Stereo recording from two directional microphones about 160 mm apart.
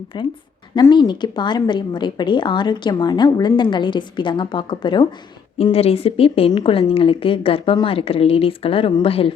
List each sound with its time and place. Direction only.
0.1 s a woman's voice: 30° left (ahead or behind)